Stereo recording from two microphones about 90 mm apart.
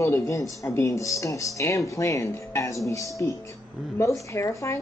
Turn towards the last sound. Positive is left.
turn(degrees=35)  # may be behind; listen again after turning